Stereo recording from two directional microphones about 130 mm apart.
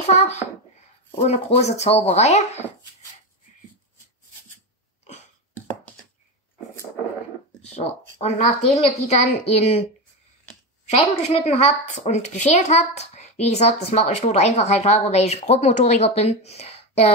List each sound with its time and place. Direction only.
0.0 s a child's voice: 55° left (ahead or behind)
7.6 s a woman's voice: 55° left (ahead or behind)
10.9 s a woman's voice: 50° left (ahead or behind)